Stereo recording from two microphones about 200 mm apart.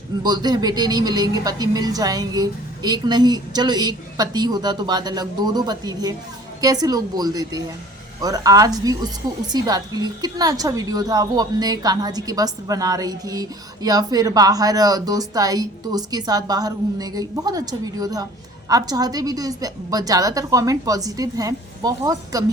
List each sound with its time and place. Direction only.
0.2 s a woman's voice: 20° right (ahead or behind)